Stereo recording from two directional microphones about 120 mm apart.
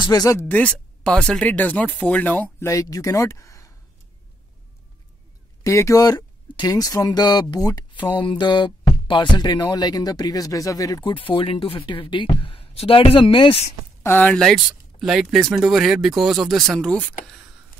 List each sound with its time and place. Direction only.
0.0 s speech: 30° left (ahead or behind)
0.5 s speech: 10° left (ahead or behind)
2.7 s speech: 25° left (ahead or behind)
5.6 s speech: 25° left (ahead or behind); by 13.7 s 50° left (ahead or behind)
14.0 s speech: 15° left (ahead or behind)
14.4 s speech: centre (ahead or behind)